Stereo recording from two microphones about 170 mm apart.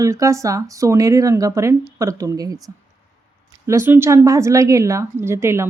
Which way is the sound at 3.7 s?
15° right (ahead or behind).